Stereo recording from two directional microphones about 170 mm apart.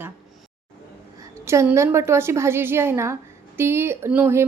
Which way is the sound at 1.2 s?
15° right (ahead or behind).